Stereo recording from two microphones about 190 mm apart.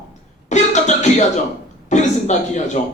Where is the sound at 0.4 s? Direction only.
40° left (ahead or behind).